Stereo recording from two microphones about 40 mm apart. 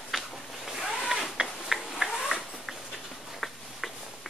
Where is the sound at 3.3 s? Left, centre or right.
Centre.